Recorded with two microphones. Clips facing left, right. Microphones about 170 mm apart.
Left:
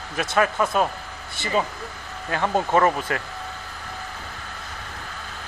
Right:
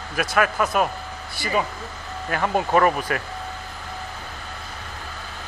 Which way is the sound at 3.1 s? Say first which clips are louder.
Right 1 dB; 25° left (ahead or behind).